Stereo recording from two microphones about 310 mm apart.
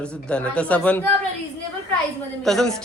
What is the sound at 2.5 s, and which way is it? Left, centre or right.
Speech, centre.